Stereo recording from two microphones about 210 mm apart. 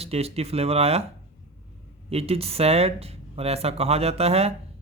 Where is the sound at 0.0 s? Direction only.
30° right (ahead or behind).